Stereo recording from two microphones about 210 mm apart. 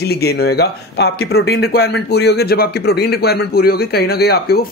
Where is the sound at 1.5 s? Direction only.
50° left (ahead or behind).